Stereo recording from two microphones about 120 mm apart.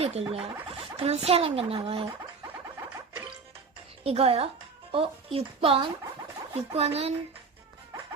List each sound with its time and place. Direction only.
0.0 s a child's voice: 60° right (ahead or behind)
2.5 s a sound: 20° right (ahead or behind)
4.0 s a child's voice: 55° right (ahead or behind)